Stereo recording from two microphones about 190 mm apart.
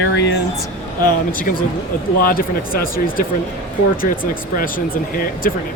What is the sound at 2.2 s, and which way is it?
Speech, 50° left (ahead or behind).